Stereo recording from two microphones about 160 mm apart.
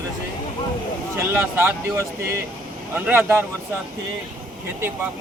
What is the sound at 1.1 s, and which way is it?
Speech, 15° right (ahead or behind).